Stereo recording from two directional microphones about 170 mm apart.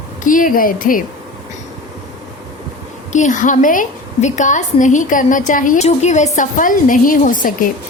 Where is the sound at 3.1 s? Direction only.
45° left (ahead or behind).